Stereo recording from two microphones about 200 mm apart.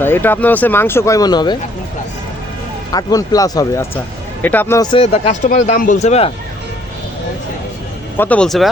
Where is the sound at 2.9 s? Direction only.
20° left (ahead or behind).